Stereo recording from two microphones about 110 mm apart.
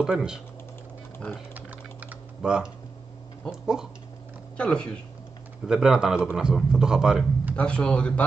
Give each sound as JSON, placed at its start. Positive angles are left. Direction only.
{"t": 0.0, "sound": "speech", "side_deg": -5}
{"t": 1.1, "sound": "speech", "side_deg": 20}
{"t": 1.5, "sound": "typing", "side_deg": -15}
{"t": 3.6, "sound": "a man's voice", "side_deg": -5}
{"t": 4.6, "sound": "speech", "side_deg": 10}
{"t": 5.7, "sound": "a man's voice", "side_deg": -5}
{"t": 7.5, "sound": "speech", "side_deg": 10}